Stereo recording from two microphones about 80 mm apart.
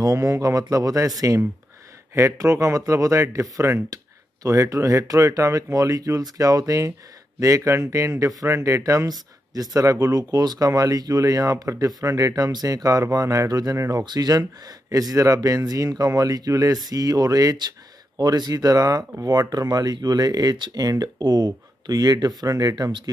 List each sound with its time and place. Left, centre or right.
0.0 s speech: right
9.1 s speech: right
20.5 s speech: right
20.8 s speech: right